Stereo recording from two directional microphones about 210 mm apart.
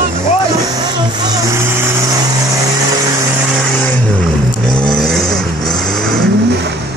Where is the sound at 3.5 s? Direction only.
5° left (ahead or behind).